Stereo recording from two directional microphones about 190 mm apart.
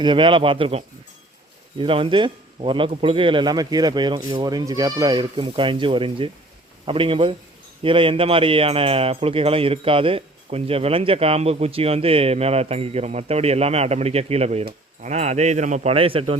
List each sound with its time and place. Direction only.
0.0 s speech: 25° right (ahead or behind)